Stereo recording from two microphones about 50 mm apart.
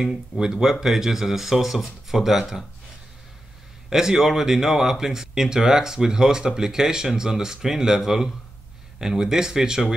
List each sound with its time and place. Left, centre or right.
0.0 s speech: centre
3.9 s speech: centre